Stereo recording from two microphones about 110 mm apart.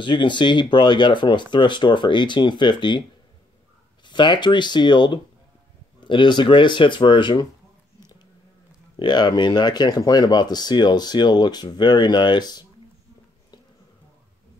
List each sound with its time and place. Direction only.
0.0 s speech: 45° left (ahead or behind)
4.0 s speech: 45° left (ahead or behind)
8.9 s speech: 45° left (ahead or behind)